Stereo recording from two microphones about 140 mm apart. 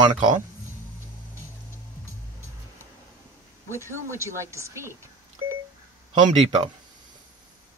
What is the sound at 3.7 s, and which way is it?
Speech, 20° right (ahead or behind).